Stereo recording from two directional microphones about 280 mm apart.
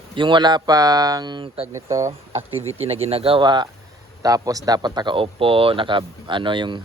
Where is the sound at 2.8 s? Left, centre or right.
Right.